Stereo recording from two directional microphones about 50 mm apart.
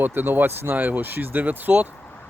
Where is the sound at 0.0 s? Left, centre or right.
Right.